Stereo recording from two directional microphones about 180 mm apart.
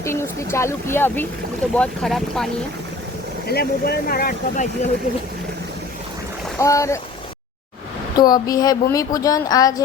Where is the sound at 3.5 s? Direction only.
60° left (ahead or behind).